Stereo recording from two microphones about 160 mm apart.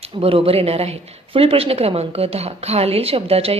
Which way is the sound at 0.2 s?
35° right (ahead or behind).